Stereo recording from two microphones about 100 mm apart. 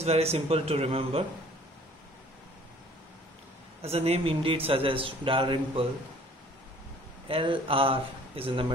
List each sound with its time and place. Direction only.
0.0 s speech: 90° right
3.9 s a man's voice: 90° right; by 5.9 s 65° right (ahead or behind)
7.2 s speech: 65° right (ahead or behind)